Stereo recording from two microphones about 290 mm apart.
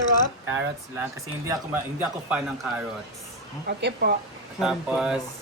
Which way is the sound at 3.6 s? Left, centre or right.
Right.